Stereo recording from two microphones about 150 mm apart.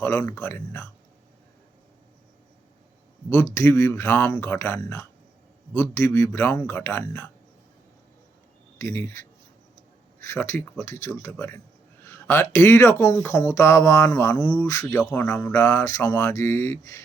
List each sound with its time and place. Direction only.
0.0 s speech: 15° left (ahead or behind)
3.2 s speech: 20° left (ahead or behind)
8.8 s speech: 15° left (ahead or behind)